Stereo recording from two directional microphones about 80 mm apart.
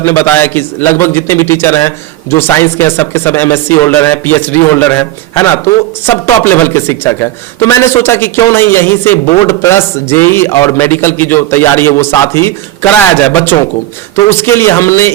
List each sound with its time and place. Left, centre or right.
0.0 s a man's voice: left
6.1 s a man's voice: left